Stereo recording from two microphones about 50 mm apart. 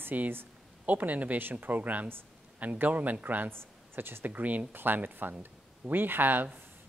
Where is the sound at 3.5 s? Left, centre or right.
Right.